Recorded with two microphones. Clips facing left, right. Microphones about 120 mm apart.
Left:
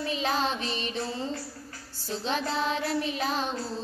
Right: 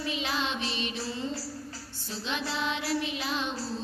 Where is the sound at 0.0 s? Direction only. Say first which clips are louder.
Left 4 dB; 40° left (ahead or behind).